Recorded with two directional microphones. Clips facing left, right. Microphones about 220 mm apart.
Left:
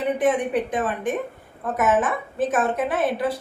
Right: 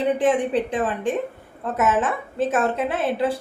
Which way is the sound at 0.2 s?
30° right (ahead or behind).